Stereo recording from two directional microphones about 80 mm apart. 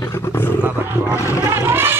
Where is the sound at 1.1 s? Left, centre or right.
Left.